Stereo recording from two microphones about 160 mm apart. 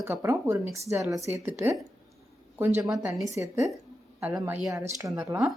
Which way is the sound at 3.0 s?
Centre (ahead or behind).